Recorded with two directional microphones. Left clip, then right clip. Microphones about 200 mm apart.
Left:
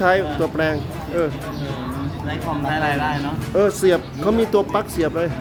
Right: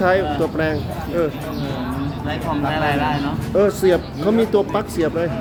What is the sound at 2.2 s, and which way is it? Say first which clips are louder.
Speech: right 2 dB; 15° left (ahead or behind).